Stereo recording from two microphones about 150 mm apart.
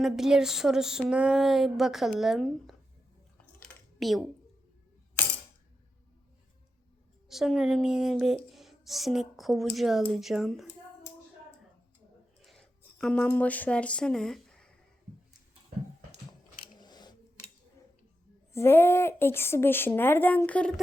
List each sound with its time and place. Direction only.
0.0 s speech: 5° right (ahead or behind)
4.0 s speech: centre (ahead or behind)
7.3 s speech: centre (ahead or behind)
12.4 s a sound: centre (ahead or behind)
16.7 s a sound: 30° left (ahead or behind)
18.5 s a woman's voice: 15° left (ahead or behind)